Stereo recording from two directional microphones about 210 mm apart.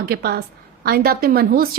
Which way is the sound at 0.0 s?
50° right (ahead or behind).